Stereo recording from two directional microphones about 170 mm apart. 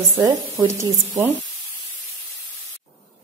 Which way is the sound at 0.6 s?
20° right (ahead or behind).